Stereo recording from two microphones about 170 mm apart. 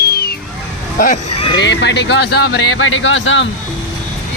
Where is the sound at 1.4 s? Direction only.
30° left (ahead or behind).